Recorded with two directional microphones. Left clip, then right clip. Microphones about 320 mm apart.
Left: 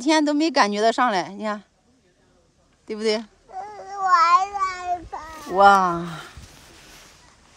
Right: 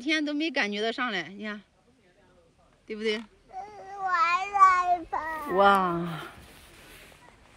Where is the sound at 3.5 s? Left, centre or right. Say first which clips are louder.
Left 7 dB; left.